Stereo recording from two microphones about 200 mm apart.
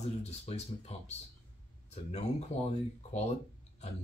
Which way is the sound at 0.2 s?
35° left (ahead or behind).